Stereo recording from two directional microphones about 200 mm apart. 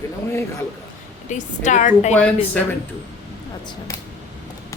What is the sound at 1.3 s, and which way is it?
Speech, 40° left (ahead or behind).